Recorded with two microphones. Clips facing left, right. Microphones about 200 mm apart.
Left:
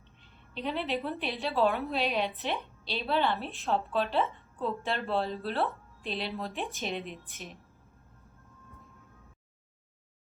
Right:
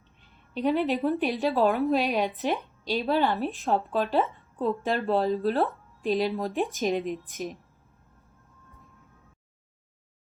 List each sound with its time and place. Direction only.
0.5 s a woman's voice: 45° right (ahead or behind)